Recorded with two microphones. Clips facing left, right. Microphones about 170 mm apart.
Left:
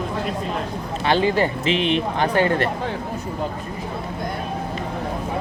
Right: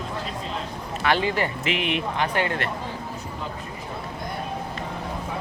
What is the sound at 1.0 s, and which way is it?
Speech, 30° left (ahead or behind).